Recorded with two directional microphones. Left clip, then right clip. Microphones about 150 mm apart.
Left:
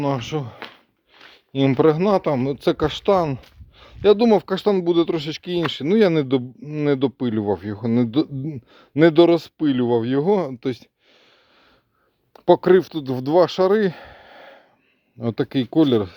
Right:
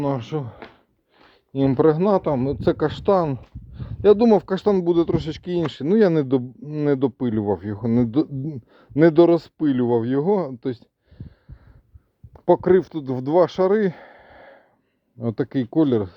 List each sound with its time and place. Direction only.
0.0 s speech: 20° left (ahead or behind)
10.5 s a sound: 30° left (ahead or behind)
12.3 s speech: 30° left (ahead or behind)